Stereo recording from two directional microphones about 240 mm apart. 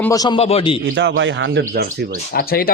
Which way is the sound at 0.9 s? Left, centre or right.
Right.